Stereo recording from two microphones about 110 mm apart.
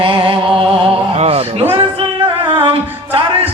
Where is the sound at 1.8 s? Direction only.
55° right (ahead or behind).